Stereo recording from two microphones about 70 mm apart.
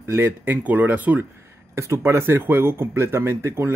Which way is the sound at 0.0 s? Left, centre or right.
Right.